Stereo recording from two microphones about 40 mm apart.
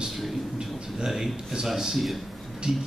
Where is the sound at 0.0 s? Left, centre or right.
Centre.